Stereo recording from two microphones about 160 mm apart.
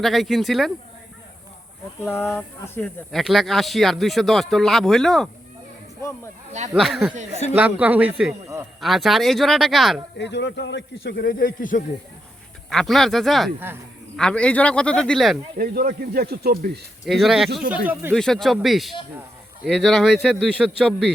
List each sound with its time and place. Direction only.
0.0 s speech: centre (ahead or behind)
2.0 s speech: 15° left (ahead or behind)
3.1 s speech: centre (ahead or behind)
6.7 s a man's voice: centre (ahead or behind); by 8.6 s 15° right (ahead or behind)
8.8 s speech: centre (ahead or behind)
10.2 s speech: 90° left; by 11.8 s 60° left (ahead or behind)
12.7 s speech: centre (ahead or behind)
15.5 s speech: 70° right (ahead or behind)
17.1 s a man's voice: centre (ahead or behind)
18.1 s speech: 5° left (ahead or behind)